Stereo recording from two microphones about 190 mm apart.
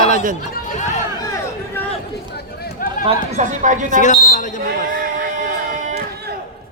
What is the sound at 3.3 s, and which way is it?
Speech, 40° right (ahead or behind).